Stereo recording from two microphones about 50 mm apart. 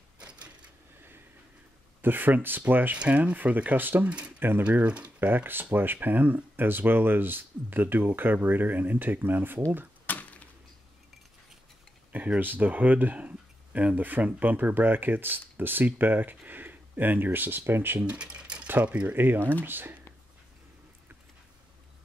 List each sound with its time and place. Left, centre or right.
0.2 s a sound: right
2.0 s speech: right
3.0 s speech: right
4.8 s speech: right
5.2 s speech: right
10.0 s a sound: left
12.4 s speech: right
18.0 s a sound: right
18.7 s speech: right